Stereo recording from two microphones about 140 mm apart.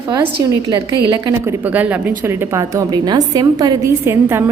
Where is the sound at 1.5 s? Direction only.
10° right (ahead or behind).